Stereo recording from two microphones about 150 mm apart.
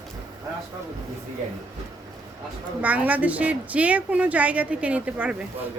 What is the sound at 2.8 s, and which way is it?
A woman's voice, 10° right (ahead or behind).